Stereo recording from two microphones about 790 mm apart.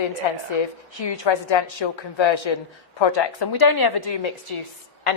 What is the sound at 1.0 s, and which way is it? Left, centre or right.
A woman's voice, left.